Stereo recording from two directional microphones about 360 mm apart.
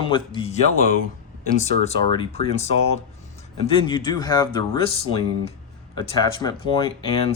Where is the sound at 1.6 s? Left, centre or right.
Centre.